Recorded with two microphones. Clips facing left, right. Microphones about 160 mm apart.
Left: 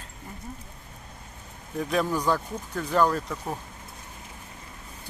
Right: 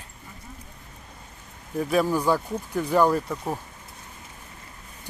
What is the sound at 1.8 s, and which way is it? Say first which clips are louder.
Speech: right 3 dB; 5° right (ahead or behind).